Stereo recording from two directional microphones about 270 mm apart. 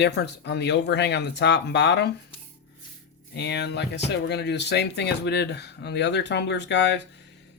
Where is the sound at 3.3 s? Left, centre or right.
Left.